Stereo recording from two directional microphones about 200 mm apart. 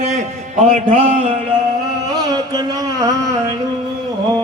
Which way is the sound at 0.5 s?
40° right (ahead or behind).